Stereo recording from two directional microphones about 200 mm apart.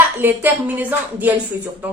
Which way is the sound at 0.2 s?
10° right (ahead or behind).